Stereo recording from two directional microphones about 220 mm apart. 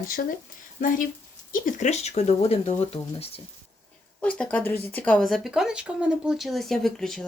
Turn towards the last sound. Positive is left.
turn(degrees=0)  # may be behind; listen again after turning